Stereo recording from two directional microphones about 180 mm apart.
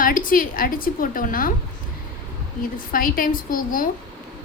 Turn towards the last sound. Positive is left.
turn(degrees=50)  # may be behind; listen again after turning